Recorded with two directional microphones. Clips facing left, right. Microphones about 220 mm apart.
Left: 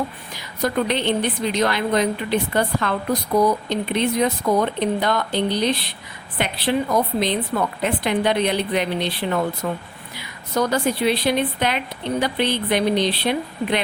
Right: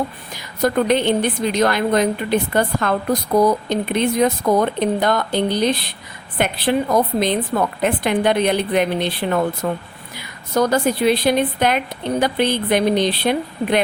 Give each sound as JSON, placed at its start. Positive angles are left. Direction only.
{"t": 0.3, "sound": "a woman's voice", "side_deg": -45}